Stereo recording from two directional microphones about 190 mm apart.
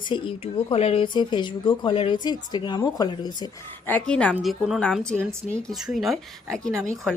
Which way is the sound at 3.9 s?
5° left (ahead or behind).